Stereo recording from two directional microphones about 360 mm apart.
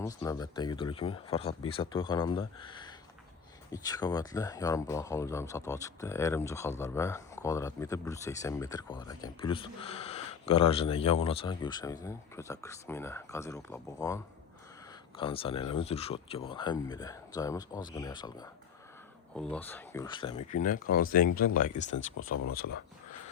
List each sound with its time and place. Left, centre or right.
0.0 s speech: centre
15.2 s speech: centre
22.2 s speech: left